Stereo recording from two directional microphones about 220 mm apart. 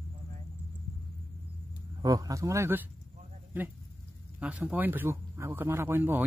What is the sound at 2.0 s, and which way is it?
Speech, 15° right (ahead or behind).